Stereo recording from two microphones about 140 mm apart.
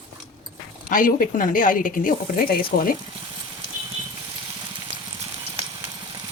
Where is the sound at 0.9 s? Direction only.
75° left (ahead or behind); by 2.9 s 90° left.